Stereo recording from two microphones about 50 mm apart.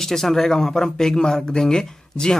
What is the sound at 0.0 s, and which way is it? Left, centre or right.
Speech, centre.